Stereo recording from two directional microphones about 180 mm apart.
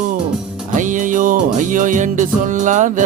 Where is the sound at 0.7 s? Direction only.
45° right (ahead or behind).